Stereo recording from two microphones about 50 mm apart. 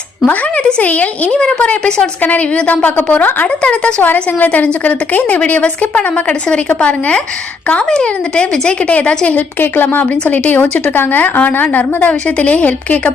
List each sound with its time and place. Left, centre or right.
0.8 s a woman's voice: left
1.3 s a woman's voice: centre
4.0 s a woman's voice: left; by 9.0 s centre
9.3 s a woman's voice: left